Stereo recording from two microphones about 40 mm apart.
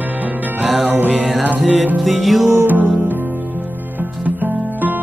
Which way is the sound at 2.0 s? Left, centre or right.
Centre.